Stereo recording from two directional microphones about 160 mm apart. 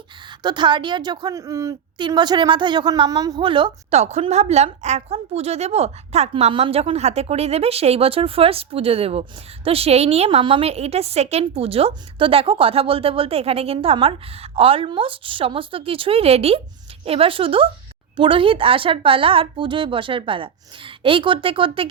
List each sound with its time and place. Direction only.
0.3 s a woman's voice: 30° right (ahead or behind)
4.0 s a woman's voice: 40° right (ahead or behind)